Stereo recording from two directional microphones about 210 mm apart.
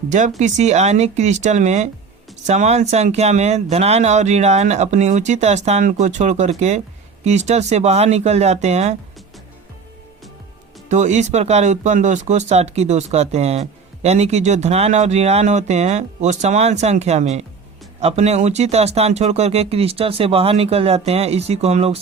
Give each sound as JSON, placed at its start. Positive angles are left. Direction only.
{"t": 0.1, "sound": "speech", "side_deg": -35}
{"t": 10.8, "sound": "speech", "side_deg": -35}